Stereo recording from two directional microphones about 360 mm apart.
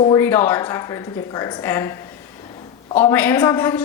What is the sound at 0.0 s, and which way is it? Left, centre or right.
A woman's voice, centre.